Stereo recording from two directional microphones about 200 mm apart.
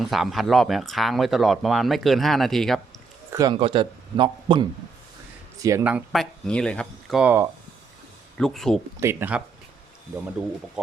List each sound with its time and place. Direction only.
0.0 s speech: centre (ahead or behind)
3.3 s speech: 20° right (ahead or behind)
5.6 s speech: 10° right (ahead or behind)
7.2 s speech: 10° right (ahead or behind)
8.4 s speech: 5° left (ahead or behind)
9.0 s speech: 10° right (ahead or behind)